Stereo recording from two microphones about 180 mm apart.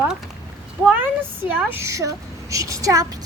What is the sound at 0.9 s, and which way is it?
A woman's voice, 10° right (ahead or behind).